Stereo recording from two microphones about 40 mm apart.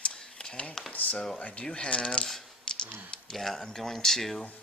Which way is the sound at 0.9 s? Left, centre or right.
Left.